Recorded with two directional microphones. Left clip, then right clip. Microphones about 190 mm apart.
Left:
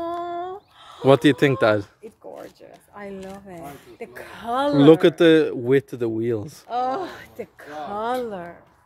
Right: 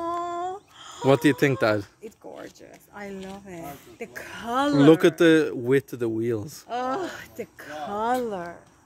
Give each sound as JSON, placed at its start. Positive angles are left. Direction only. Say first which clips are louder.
{"t": 0.0, "sound": "a sound", "louder": "left 1 dB", "side_deg": -55}
{"t": 1.0, "sound": "speech", "louder": "left 4 dB", "side_deg": 15}
{"t": 4.0, "sound": "speech", "louder": "left 1 dB", "side_deg": -50}
{"t": 4.7, "sound": "speech", "louder": "left 3 dB", "side_deg": 5}
{"t": 6.7, "sound": "speech", "louder": "left 4 dB", "side_deg": -45}
{"t": 8.3, "sound": "speech", "louder": "right 1 dB", "side_deg": -20}